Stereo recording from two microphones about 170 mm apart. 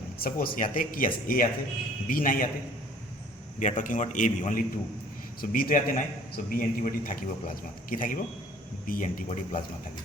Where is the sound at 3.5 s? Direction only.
45° left (ahead or behind).